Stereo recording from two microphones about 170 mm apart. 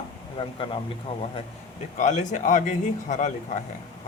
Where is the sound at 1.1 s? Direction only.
35° left (ahead or behind).